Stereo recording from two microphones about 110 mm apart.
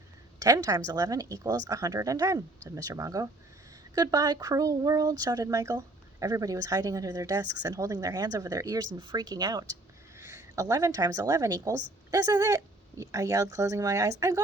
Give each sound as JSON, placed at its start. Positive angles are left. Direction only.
{"t": 0.3, "sound": "speech", "side_deg": -35}
{"t": 9.0, "sound": "speech", "side_deg": -45}
{"t": 10.2, "sound": "a woman's voice", "side_deg": -25}